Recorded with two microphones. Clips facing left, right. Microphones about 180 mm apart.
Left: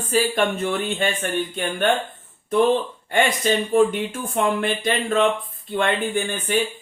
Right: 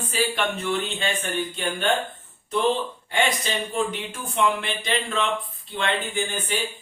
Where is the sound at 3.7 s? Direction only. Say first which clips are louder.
Left 9 dB; 50° left (ahead or behind).